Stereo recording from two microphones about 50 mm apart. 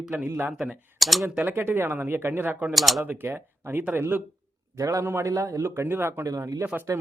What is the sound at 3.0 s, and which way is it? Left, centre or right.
Speech, right.